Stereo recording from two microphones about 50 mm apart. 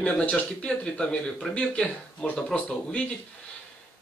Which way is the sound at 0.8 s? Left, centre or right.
Centre.